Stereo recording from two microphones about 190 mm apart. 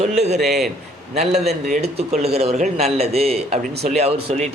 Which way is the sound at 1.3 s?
40° right (ahead or behind).